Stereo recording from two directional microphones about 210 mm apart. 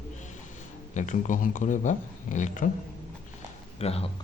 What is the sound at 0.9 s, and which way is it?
Speech, 35° left (ahead or behind).